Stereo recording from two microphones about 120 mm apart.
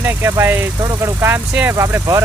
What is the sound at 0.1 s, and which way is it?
Speech, 20° right (ahead or behind).